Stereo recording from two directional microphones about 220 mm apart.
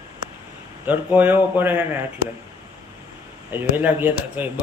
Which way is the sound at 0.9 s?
10° right (ahead or behind).